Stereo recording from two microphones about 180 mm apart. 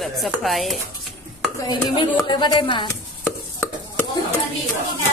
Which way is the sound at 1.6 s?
20° left (ahead or behind).